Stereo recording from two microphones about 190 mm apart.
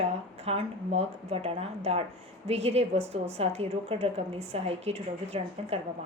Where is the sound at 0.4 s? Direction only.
35° right (ahead or behind).